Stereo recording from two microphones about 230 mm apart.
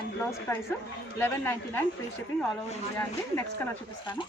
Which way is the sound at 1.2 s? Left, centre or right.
Centre.